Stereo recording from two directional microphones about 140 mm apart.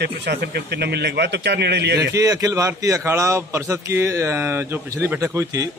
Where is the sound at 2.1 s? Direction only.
25° right (ahead or behind).